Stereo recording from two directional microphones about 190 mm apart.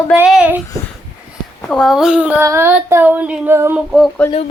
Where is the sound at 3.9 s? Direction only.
Centre (ahead or behind).